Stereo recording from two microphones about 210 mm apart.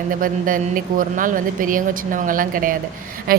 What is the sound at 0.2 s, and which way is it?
A woman's voice, 40° right (ahead or behind).